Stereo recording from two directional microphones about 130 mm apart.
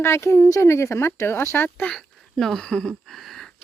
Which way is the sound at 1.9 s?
5° left (ahead or behind).